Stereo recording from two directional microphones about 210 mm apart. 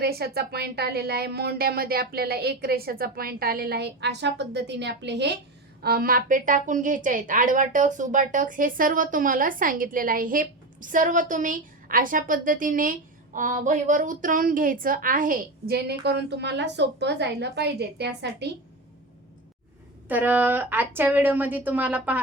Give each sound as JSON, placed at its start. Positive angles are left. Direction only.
{"t": 0.0, "sound": "a woman's voice", "side_deg": -50}
{"t": 20.1, "sound": "speech", "side_deg": -10}